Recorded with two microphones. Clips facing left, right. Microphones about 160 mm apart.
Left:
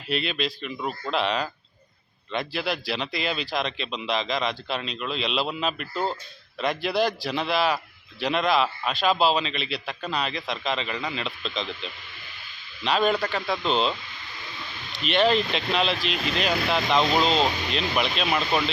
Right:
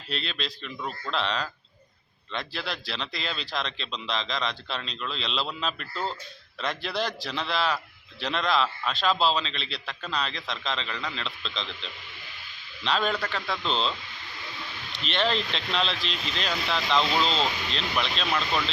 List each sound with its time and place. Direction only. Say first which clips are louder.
0.1 s a man's voice: left 7 dB; 10° left (ahead or behind)
15.0 s speech: left 6 dB; 10° left (ahead or behind)
16.1 s speech: left 6 dB; 55° left (ahead or behind)
17.7 s speech: left 4 dB; 10° left (ahead or behind)